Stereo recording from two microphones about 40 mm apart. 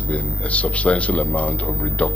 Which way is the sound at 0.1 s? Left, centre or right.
Left.